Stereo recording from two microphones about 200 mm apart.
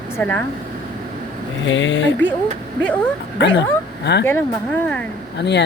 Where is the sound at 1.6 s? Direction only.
65° left (ahead or behind).